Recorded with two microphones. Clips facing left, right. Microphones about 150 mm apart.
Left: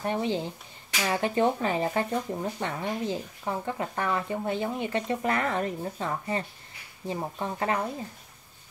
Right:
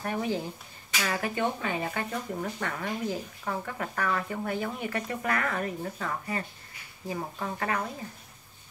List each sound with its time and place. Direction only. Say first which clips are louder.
0.0 s speech: left 2 dB; 25° left (ahead or behind)